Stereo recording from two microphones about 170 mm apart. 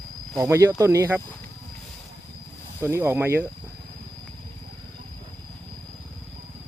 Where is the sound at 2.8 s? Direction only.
15° right (ahead or behind).